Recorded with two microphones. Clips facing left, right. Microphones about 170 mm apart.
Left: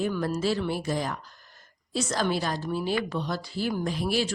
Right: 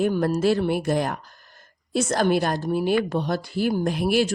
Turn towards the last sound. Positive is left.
turn(degrees=-55)  # may be behind; listen again after turning